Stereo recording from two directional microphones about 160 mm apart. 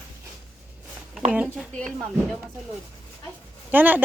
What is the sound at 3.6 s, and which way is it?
Speech, 10° right (ahead or behind).